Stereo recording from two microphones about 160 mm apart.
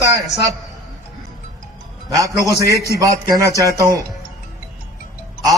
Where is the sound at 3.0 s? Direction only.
20° right (ahead or behind).